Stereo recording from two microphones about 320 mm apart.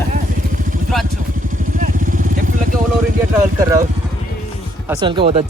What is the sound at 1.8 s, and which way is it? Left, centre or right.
Vehicle, right.